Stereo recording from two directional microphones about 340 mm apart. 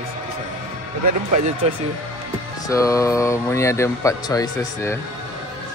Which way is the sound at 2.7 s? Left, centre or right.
Centre.